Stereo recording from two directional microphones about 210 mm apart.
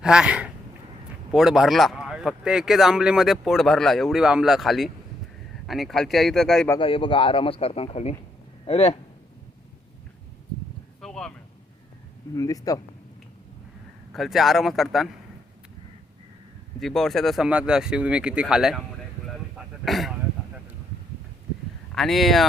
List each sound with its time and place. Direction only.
0.0 s speech: 5° right (ahead or behind)
6.7 s speech: 25° left (ahead or behind)
11.0 s a sound: 5° left (ahead or behind)
12.3 s speech: 15° left (ahead or behind)
14.1 s speech: centre (ahead or behind)
16.8 s speech: centre (ahead or behind)
19.5 s throat clearing: centre (ahead or behind)
21.9 s speech: centre (ahead or behind)